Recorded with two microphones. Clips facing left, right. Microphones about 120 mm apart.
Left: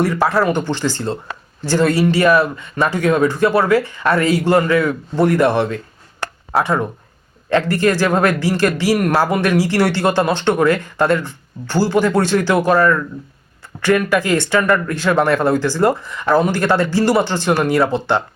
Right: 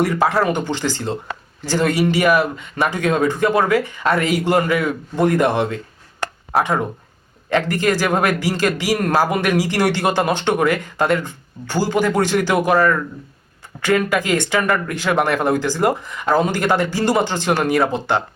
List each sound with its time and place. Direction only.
0.0 s a man's voice: 20° right (ahead or behind)